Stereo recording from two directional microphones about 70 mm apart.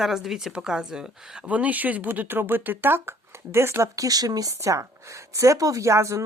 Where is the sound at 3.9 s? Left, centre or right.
Right.